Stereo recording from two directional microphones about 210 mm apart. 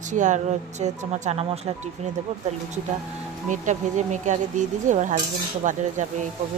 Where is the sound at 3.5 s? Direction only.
35° right (ahead or behind).